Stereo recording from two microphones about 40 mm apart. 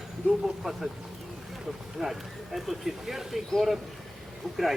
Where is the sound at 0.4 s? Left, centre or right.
Centre.